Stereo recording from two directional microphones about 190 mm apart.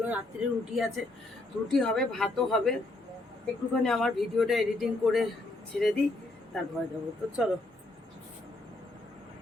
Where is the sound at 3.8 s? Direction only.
Centre (ahead or behind).